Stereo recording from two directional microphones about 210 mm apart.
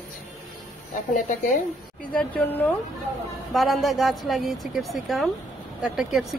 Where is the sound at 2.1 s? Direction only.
10° left (ahead or behind).